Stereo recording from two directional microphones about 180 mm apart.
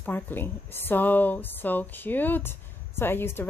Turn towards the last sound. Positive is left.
turn(degrees=10)  # may be behind; listen again after turning